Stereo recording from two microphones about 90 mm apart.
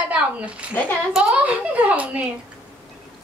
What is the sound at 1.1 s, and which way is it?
Speech, 5° right (ahead or behind).